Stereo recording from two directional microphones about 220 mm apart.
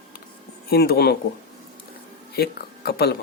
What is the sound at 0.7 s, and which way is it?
Speech, 45° left (ahead or behind).